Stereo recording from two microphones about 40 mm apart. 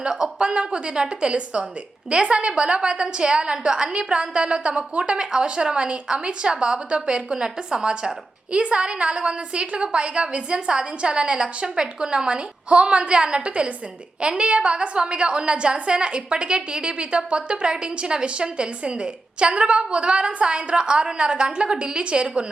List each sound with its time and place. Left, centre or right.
0.0 s a woman's voice: centre